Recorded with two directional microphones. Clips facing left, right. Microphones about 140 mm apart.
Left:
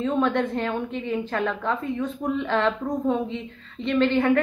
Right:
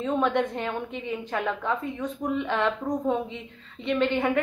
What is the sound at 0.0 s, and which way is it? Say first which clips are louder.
A woman's voice: left 2 dB; 15° right (ahead or behind).